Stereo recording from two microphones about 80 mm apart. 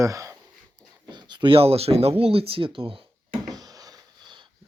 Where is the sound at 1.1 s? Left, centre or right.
Right.